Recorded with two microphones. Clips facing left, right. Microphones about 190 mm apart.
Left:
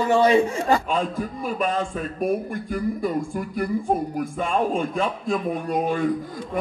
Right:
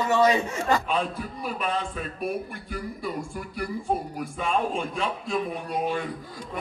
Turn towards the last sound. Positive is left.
turn(degrees=45)  # may be behind; listen again after turning